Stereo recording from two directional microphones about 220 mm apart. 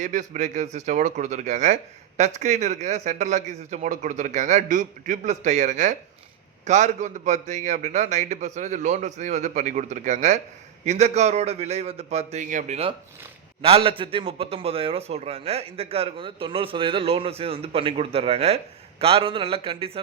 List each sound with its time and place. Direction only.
0.0 s a man's voice: 35° right (ahead or behind)